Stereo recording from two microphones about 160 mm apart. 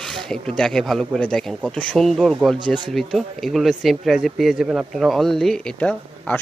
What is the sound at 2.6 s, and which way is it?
Speech, 30° right (ahead or behind).